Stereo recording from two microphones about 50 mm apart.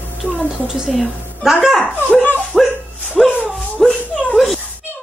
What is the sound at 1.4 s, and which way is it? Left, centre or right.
Speech, centre.